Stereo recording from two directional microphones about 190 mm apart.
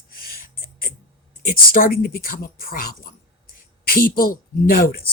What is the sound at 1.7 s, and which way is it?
Speech, 50° left (ahead or behind).